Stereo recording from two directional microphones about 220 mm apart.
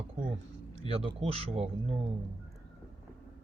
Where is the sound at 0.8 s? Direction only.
25° right (ahead or behind).